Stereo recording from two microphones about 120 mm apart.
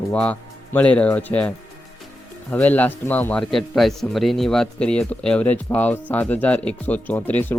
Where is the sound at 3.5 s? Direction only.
Centre (ahead or behind).